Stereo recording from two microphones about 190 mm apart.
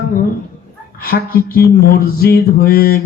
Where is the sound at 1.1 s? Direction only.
50° left (ahead or behind).